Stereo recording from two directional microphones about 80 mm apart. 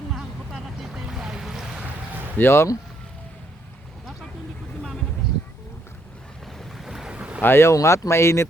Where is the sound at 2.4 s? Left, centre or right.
Left.